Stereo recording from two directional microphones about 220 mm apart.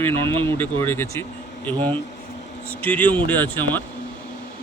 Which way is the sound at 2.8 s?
5° left (ahead or behind).